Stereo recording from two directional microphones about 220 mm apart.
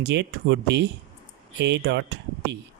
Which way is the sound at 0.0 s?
50° right (ahead or behind).